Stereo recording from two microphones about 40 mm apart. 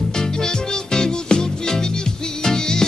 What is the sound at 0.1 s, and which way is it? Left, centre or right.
Music, centre.